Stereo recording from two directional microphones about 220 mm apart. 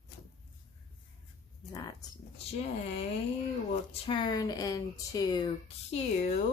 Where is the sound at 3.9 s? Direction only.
20° left (ahead or behind).